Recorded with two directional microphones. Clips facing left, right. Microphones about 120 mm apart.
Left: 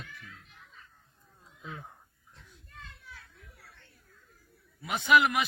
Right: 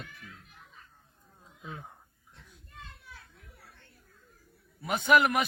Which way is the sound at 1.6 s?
15° right (ahead or behind).